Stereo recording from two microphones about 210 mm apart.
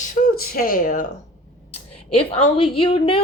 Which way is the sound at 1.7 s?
25° left (ahead or behind).